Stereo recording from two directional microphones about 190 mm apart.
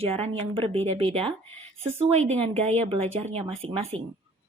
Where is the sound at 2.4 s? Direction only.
35° right (ahead or behind).